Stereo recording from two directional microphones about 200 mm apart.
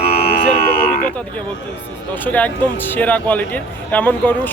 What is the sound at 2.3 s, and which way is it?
Speech, 10° left (ahead or behind).